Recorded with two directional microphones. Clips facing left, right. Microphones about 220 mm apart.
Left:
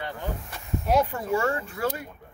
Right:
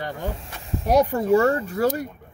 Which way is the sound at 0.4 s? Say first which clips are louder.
Right 1 dB; 35° right (ahead or behind).